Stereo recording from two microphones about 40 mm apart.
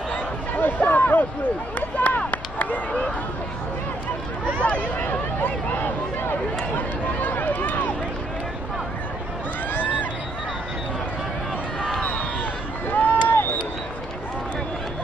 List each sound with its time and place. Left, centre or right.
0.6 s speech: left
4.6 s speech: left
5.0 s speech: left
7.2 s speech: left
12.9 s run: left